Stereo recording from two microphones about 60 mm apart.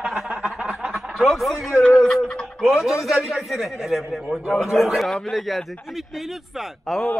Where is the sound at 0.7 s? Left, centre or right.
Centre.